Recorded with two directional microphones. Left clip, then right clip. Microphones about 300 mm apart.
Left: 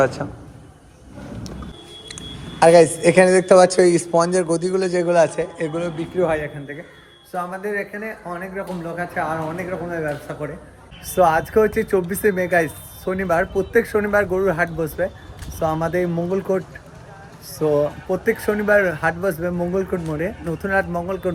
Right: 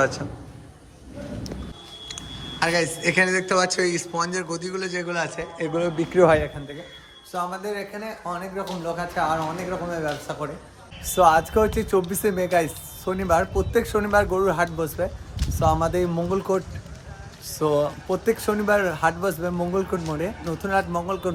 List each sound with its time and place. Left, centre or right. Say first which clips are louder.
0.2 s a man's voice: left 6 dB; centre
2.0 s a man's voice: even; centre; by 6.5 s right
7.3 s speech: left 3 dB; centre
11.1 s speech: left 1 dB; centre